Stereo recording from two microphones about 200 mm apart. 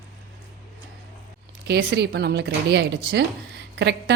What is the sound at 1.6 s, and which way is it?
Speech, 55° right (ahead or behind).